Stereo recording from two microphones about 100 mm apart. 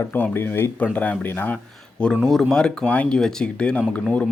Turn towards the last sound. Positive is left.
turn(degrees=10)  # may be behind; listen again after turning